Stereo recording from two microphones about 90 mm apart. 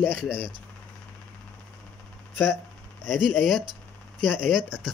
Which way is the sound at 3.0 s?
5° right (ahead or behind).